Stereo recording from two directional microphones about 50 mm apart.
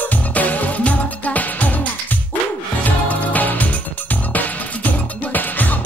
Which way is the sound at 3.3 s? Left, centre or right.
Left.